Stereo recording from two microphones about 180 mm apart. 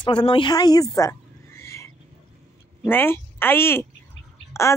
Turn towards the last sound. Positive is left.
turn(degrees=15)  # may be behind; listen again after turning